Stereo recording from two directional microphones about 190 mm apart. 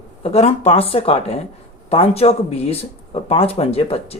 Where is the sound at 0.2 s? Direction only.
35° left (ahead or behind).